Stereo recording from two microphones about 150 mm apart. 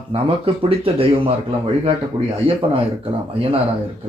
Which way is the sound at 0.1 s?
40° right (ahead or behind).